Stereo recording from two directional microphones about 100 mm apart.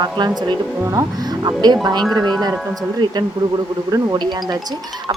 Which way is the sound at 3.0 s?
50° right (ahead or behind).